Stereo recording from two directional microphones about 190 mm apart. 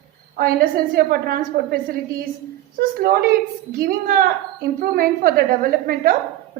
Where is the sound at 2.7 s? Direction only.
50° right (ahead or behind).